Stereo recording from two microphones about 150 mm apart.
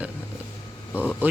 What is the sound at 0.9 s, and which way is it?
Speech, 15° left (ahead or behind).